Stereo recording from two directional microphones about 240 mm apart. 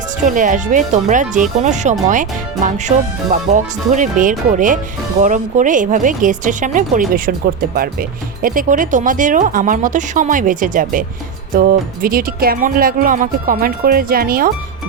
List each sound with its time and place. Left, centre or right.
0.3 s speech: right